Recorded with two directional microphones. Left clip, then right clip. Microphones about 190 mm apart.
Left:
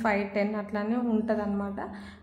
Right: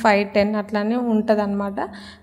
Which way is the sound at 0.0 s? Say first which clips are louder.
Right 10 dB; 40° right (ahead or behind).